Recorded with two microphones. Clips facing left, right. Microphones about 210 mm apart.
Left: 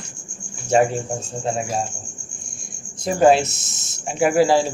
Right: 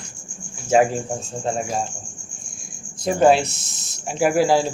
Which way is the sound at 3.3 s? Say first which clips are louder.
Left 1 dB; centre (ahead or behind).